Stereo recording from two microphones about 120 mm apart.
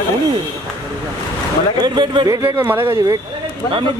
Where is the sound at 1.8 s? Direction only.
35° right (ahead or behind).